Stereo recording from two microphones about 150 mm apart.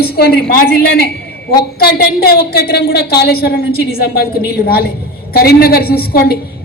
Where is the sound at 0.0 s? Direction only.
90° left.